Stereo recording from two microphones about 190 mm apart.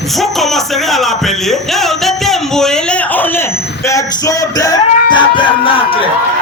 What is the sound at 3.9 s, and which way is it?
Music, 20° left (ahead or behind).